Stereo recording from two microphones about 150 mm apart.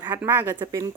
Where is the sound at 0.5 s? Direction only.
30° right (ahead or behind).